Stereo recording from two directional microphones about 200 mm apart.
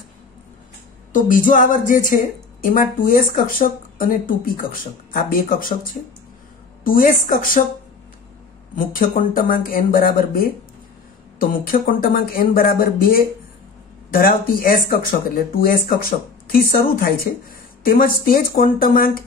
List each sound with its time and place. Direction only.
1.1 s music: 40° left (ahead or behind)
2.6 s speech: 45° left (ahead or behind)
6.8 s speech: 45° left (ahead or behind)
8.7 s speech: 45° left (ahead or behind)
17.8 s speech: 45° left (ahead or behind)